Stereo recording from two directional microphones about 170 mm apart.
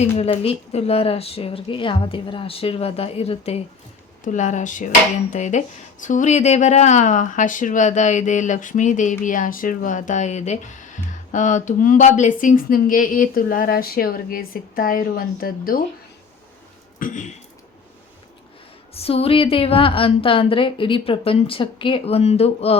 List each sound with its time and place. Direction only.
0.0 s a woman's voice: 35° left (ahead or behind); by 15.8 s 60° left (ahead or behind)
17.0 s speech: 45° left (ahead or behind)
18.9 s a woman's voice: 35° left (ahead or behind)